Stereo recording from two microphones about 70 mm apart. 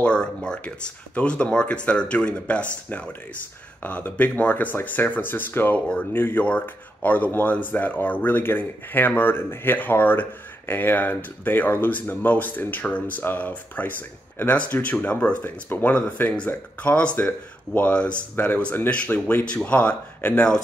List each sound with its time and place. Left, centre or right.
0.0 s speech: centre